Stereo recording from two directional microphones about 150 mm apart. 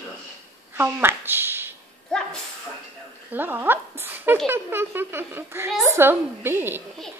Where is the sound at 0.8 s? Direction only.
15° right (ahead or behind).